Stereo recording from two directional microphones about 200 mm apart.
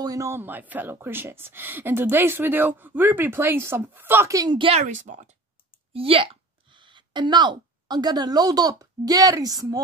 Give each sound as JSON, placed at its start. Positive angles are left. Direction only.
{"t": 0.0, "sound": "speech", "side_deg": -15}
{"t": 5.9, "sound": "speech", "side_deg": -30}